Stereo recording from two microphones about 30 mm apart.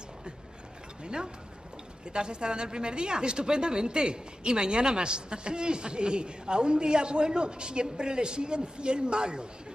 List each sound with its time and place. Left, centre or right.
1.0 s a woman's voice: right